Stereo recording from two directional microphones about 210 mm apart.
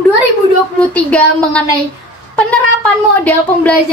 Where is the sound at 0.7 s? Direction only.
5° left (ahead or behind).